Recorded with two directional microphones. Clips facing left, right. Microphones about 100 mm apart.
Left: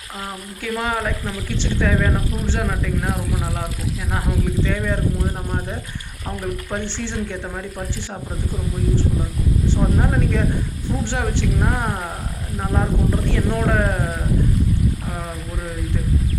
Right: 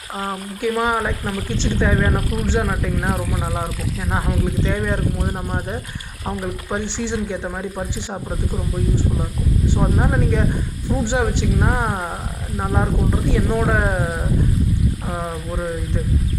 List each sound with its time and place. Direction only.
0.6 s speech: 20° right (ahead or behind)
4.6 s speech: 20° right (ahead or behind)
6.2 s speech: 15° right (ahead or behind)
9.6 s speech: 15° right (ahead or behind)
13.3 s speech: 15° right (ahead or behind)